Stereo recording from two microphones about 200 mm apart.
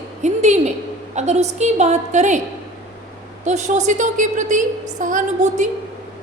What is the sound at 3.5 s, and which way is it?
A woman's voice, 35° right (ahead or behind).